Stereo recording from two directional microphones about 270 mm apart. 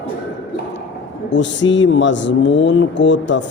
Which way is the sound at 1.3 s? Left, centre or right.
Left.